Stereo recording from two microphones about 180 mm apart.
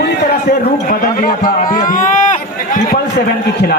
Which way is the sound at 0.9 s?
50° left (ahead or behind).